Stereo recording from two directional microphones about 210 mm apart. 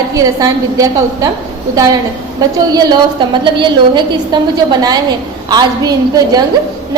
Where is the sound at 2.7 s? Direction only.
20° right (ahead or behind).